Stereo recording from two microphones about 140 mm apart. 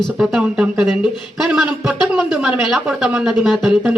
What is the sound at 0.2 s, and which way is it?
A man's voice, 5° right (ahead or behind).